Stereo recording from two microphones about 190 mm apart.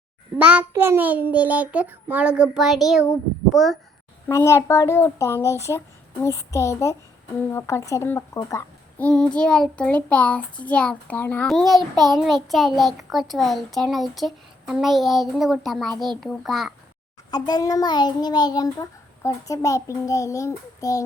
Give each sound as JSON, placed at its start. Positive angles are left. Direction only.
{"t": 0.3, "sound": "a child's voice", "side_deg": -5}
{"t": 3.0, "sound": "a child's voice", "side_deg": 15}
{"t": 17.3, "sound": "a child's voice", "side_deg": 20}